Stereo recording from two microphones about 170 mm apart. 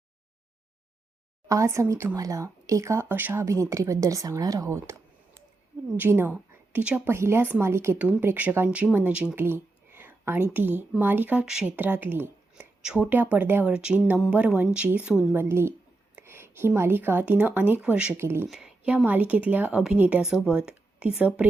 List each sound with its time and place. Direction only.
1.5 s speech: 20° right (ahead or behind)
9.3 s a sound: 10° right (ahead or behind)
10.5 s speech: 10° right (ahead or behind)
18.4 s speech: 5° right (ahead or behind)